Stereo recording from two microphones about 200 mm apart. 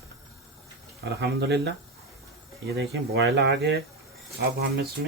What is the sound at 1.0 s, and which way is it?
Speech, 55° right (ahead or behind).